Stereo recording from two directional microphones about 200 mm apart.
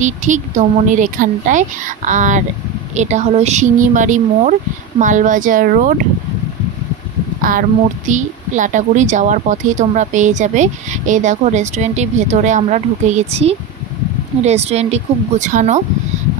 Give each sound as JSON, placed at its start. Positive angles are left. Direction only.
{"t": 0.0, "sound": "a woman's voice", "side_deg": -35}
{"t": 8.1, "sound": "a woman's voice", "side_deg": -40}